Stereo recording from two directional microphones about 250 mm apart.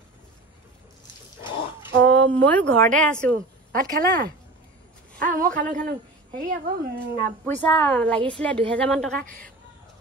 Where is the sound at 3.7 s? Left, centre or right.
Right.